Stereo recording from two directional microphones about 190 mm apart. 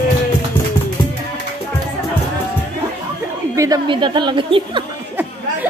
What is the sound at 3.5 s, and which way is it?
A woman's voice, 20° right (ahead or behind).